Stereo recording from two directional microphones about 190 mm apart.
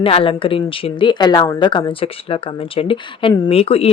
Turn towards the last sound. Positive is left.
turn(degrees=30)  # may be behind; listen again after turning